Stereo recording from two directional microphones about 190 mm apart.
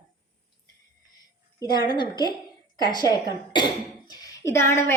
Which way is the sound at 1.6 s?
20° left (ahead or behind).